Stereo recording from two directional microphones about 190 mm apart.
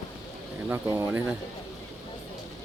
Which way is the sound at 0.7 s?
10° right (ahead or behind).